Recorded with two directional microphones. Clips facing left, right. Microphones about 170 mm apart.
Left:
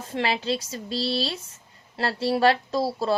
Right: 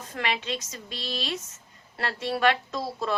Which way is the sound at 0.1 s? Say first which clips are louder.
Left 5 dB; 30° left (ahead or behind).